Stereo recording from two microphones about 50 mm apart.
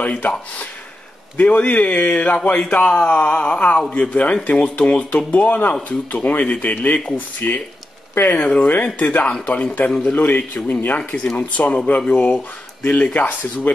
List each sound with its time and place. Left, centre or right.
0.0 s a man's voice: left
1.3 s a man's voice: left
10.1 s a man's voice: left
12.9 s a man's voice: left